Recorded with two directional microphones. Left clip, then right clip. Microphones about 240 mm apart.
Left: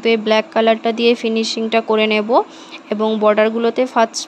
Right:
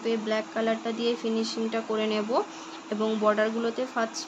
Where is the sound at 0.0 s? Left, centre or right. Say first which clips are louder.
Left 13 dB; left.